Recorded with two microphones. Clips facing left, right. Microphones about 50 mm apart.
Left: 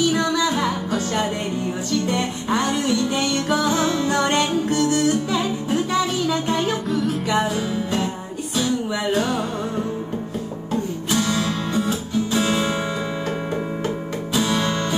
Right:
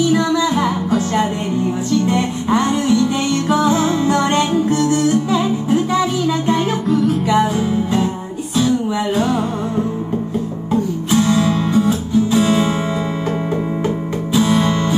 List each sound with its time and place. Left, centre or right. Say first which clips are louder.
0.3 s music: right 4 dB; right
6.9 s music: right 6 dB; centre
7.5 s music: right 6 dB; right
9.1 s music: right 3 dB; right
10.7 s music: right 6 dB; right
13.8 s music: right 5 dB; right